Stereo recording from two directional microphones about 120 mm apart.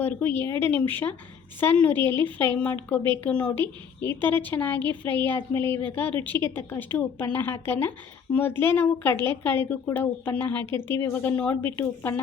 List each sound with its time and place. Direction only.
0.0 s a woman's voice: 15° left (ahead or behind)